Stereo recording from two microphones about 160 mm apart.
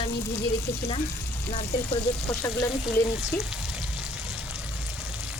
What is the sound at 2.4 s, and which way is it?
Frying, 20° left (ahead or behind).